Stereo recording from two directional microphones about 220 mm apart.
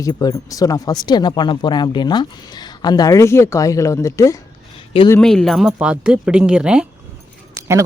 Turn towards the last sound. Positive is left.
turn(degrees=-10)  # may be behind; listen again after turning